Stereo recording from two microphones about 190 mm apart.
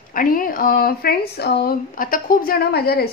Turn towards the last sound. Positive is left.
turn(degrees=55)  # may be behind; listen again after turning